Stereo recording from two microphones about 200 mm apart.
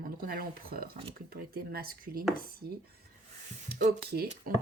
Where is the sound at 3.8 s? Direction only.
50° right (ahead or behind).